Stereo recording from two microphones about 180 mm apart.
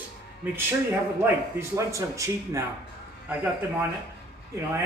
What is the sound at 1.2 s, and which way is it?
Speech, 15° right (ahead or behind).